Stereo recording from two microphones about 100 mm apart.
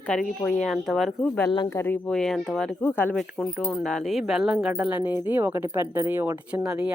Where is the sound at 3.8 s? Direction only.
5° left (ahead or behind).